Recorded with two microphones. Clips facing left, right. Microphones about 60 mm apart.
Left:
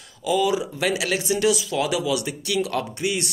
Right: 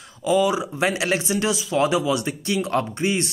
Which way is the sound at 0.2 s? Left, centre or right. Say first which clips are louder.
Right 2 dB; right.